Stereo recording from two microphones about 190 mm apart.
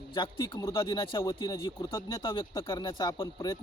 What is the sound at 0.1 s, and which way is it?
Speech, 25° left (ahead or behind).